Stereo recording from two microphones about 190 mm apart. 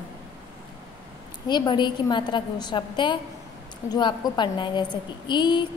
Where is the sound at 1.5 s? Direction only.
25° left (ahead or behind).